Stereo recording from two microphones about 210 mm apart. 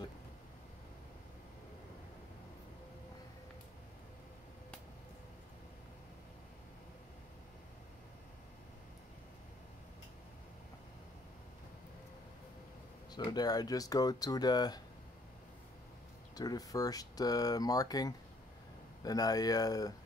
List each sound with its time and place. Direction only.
13.1 s speech: 20° left (ahead or behind)
16.3 s speech: 15° left (ahead or behind)